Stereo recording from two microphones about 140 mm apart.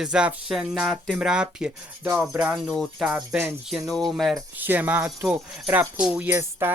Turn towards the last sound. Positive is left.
turn(degrees=-15)  # may be behind; listen again after turning